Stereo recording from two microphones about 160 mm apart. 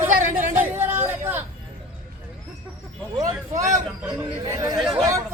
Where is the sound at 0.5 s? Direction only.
15° right (ahead or behind).